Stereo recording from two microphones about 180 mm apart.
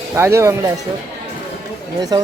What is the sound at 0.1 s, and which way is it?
Speech, 15° right (ahead or behind).